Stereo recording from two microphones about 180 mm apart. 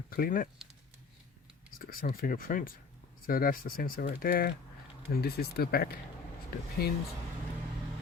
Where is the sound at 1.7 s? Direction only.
55° left (ahead or behind).